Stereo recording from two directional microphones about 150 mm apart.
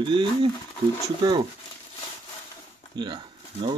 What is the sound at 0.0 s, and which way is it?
Speech, 35° right (ahead or behind).